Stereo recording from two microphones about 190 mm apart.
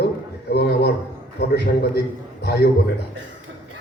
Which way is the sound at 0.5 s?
60° left (ahead or behind).